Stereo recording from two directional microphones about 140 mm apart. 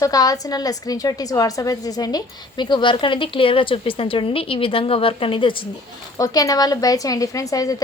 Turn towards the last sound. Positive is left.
turn(degrees=25)  # may be behind; listen again after turning